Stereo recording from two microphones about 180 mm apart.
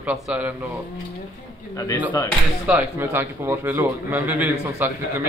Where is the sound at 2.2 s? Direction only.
20° left (ahead or behind).